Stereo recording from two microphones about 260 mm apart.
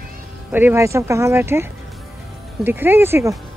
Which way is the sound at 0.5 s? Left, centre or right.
Centre.